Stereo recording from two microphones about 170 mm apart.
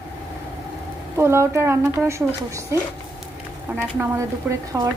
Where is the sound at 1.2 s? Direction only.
15° right (ahead or behind).